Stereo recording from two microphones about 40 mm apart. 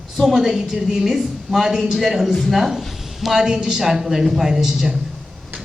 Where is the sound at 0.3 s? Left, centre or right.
Centre.